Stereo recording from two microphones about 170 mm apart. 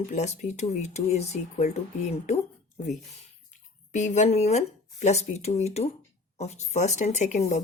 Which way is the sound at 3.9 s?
45° left (ahead or behind).